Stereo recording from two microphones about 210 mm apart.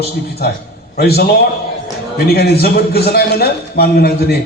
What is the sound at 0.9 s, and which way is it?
A man's voice, 50° left (ahead or behind).